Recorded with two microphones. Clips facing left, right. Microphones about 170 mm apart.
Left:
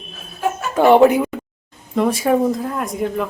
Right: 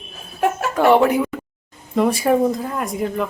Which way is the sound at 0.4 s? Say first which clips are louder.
Right 2 dB; 65° right (ahead or behind).